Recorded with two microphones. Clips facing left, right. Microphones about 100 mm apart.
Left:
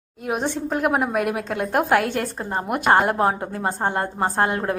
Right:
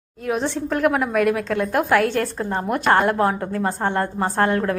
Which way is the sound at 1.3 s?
20° left (ahead or behind).